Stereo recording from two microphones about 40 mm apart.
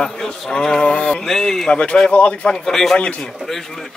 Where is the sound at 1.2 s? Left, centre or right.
Centre.